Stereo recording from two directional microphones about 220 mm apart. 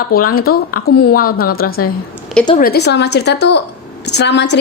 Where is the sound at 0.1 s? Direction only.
40° left (ahead or behind).